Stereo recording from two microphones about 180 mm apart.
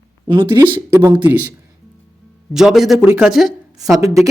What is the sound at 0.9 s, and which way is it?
Speech, 10° right (ahead or behind).